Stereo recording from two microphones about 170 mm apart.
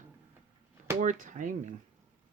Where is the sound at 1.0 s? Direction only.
50° right (ahead or behind).